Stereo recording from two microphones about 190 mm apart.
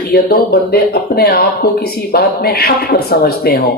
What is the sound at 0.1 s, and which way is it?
Speech, 50° left (ahead or behind).